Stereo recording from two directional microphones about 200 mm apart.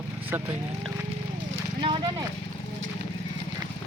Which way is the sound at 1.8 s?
25° right (ahead or behind).